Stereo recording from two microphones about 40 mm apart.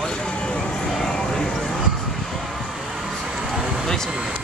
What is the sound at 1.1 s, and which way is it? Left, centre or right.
Clip-clop, centre.